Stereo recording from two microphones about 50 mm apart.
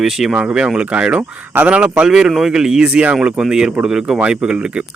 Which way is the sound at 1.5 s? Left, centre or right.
Right.